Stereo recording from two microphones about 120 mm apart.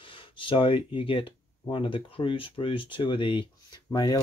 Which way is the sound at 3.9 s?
30° left (ahead or behind).